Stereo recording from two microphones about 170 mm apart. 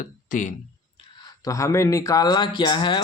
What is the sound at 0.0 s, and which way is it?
Speech, 50° left (ahead or behind).